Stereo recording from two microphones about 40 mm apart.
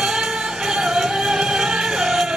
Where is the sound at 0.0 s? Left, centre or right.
Centre.